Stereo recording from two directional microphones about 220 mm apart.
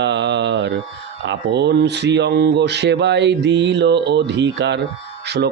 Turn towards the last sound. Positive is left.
turn(degrees=-50)  # may be behind; listen again after turning